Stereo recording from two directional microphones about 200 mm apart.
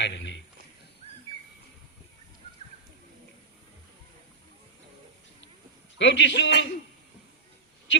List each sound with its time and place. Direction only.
0.0 s a man's voice: 65° left (ahead or behind)
6.0 s a man's voice: 65° left (ahead or behind)